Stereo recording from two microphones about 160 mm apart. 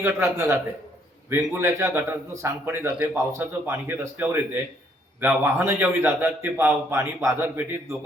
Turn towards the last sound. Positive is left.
turn(degrees=-15)  # may be behind; listen again after turning